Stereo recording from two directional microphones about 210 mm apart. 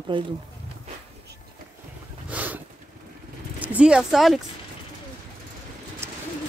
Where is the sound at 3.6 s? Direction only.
5° right (ahead or behind).